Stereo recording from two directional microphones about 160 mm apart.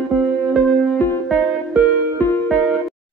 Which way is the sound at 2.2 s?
10° left (ahead or behind).